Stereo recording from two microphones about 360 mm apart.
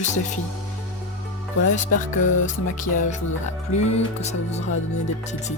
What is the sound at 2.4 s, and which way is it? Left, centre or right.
Music, left.